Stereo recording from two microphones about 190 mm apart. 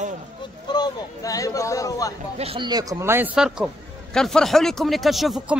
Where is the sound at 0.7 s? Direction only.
20° left (ahead or behind).